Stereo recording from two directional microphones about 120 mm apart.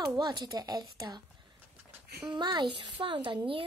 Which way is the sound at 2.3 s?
40° right (ahead or behind).